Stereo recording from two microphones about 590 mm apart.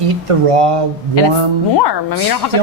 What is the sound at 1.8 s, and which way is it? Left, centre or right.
Speech, left.